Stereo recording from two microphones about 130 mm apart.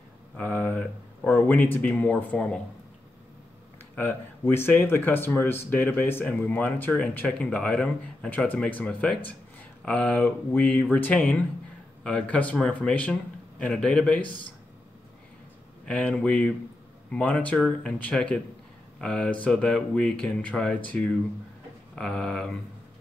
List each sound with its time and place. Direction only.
0.4 s speech: 15° left (ahead or behind)
3.9 s speech: 15° left (ahead or behind)
15.8 s speech: 10° left (ahead or behind)